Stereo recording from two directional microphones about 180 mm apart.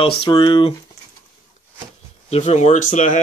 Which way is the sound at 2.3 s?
40° left (ahead or behind).